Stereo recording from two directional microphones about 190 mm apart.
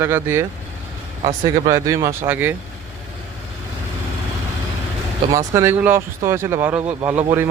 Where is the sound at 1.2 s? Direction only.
35° right (ahead or behind).